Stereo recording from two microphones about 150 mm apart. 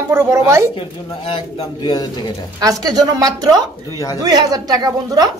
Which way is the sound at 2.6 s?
25° right (ahead or behind).